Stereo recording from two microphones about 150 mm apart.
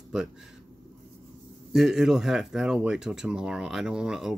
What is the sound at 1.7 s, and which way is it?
Speech, 5° right (ahead or behind).